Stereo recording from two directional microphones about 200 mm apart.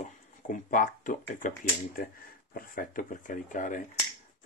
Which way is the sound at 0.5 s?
40° left (ahead or behind).